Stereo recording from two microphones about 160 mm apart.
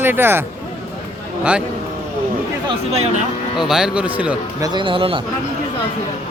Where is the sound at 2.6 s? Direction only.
45° right (ahead or behind).